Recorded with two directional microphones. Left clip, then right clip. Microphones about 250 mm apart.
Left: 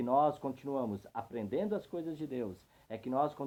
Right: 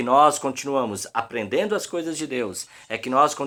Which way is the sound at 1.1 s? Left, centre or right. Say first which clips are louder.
Right 14 dB; centre.